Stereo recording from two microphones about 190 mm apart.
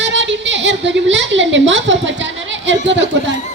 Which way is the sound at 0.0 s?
70° right (ahead or behind).